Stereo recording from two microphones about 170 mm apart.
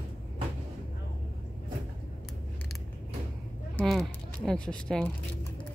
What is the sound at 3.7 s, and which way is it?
Speech, centre (ahead or behind).